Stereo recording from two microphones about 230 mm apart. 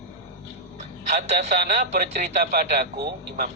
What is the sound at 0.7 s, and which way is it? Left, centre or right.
A man's voice, right.